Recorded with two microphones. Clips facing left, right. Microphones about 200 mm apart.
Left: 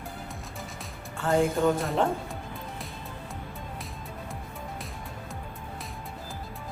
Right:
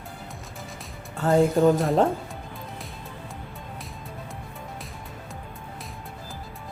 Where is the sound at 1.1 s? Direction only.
40° right (ahead or behind).